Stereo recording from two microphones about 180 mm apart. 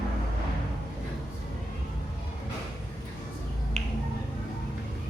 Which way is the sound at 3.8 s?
40° right (ahead or behind).